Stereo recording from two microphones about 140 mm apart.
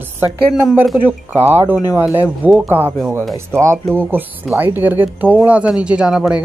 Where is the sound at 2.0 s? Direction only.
10° right (ahead or behind).